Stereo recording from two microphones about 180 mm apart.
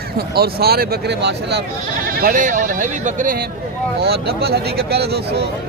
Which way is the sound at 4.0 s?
65° right (ahead or behind).